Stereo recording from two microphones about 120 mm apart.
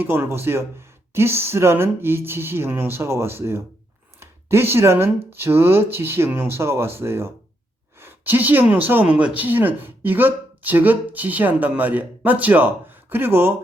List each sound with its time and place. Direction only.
0.0 s speech: 15° right (ahead or behind)